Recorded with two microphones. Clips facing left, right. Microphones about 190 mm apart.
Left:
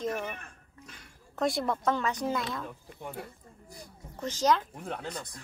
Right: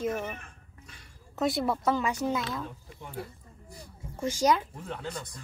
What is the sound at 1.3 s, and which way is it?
Speech, centre (ahead or behind).